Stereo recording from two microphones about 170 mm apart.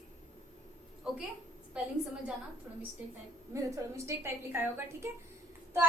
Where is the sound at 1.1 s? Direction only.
5° right (ahead or behind).